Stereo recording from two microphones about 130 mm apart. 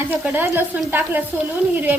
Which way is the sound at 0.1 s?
15° right (ahead or behind).